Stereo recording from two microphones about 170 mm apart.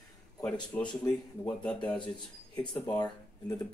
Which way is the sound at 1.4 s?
5° left (ahead or behind).